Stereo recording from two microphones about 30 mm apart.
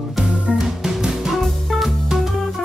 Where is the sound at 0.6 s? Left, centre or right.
Centre.